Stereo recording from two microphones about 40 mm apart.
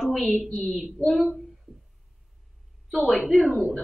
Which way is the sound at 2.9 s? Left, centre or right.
Centre.